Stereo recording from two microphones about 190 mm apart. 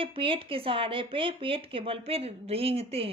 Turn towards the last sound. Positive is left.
turn(degrees=-30)  # may be behind; listen again after turning